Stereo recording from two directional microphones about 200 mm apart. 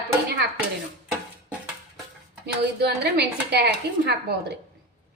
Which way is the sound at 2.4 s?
55° right (ahead or behind).